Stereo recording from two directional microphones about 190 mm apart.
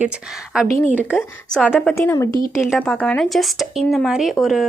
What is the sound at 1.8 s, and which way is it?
A woman's voice, 10° left (ahead or behind).